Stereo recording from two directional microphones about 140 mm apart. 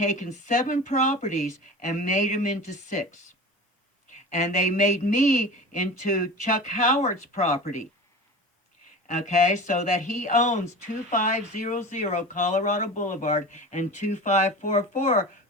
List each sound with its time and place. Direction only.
0.0 s speech: 60° left (ahead or behind)
4.1 s speech: 60° left (ahead or behind)
9.0 s speech: 60° left (ahead or behind)